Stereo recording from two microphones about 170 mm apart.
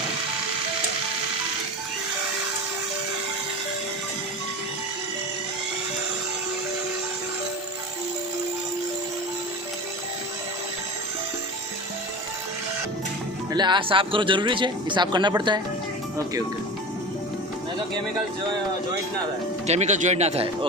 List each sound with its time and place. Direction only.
13.5 s speech: 25° right (ahead or behind)
19.6 s speech: 40° right (ahead or behind)